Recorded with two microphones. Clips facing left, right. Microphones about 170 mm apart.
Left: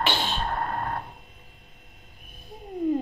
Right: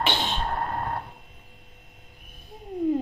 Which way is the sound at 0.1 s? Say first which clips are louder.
Even; 20° right (ahead or behind).